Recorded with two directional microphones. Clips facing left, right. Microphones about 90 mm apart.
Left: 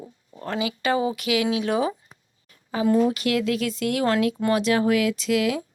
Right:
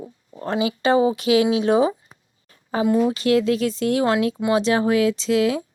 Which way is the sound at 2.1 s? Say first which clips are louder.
Right 2 dB; 35° right (ahead or behind).